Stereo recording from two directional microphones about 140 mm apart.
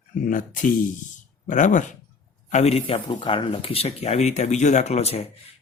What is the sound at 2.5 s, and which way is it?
Speech, 50° left (ahead or behind).